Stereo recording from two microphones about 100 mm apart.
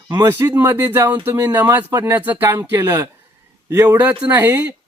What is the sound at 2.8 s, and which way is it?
Speech, 30° right (ahead or behind).